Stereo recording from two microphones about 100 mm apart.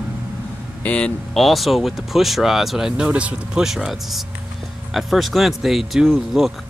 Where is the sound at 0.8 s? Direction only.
10° left (ahead or behind).